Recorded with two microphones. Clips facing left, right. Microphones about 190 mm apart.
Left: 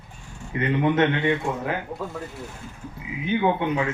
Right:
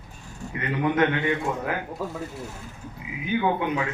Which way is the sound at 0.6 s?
25° left (ahead or behind).